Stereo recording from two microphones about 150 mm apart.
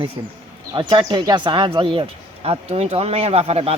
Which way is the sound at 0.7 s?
30° right (ahead or behind).